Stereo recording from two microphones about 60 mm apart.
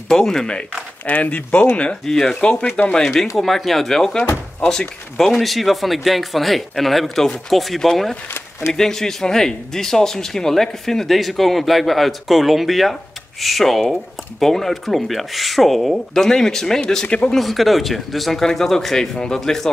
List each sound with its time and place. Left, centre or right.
0.1 s speech: centre
1.0 s speech: left
2.0 s speech: centre
17.4 s speech: centre